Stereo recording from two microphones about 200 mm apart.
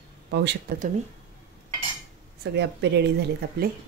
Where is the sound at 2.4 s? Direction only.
60° right (ahead or behind).